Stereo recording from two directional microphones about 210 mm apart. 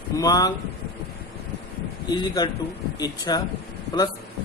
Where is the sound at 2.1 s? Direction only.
20° left (ahead or behind).